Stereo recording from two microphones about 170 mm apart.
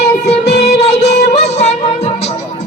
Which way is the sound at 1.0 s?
40° left (ahead or behind).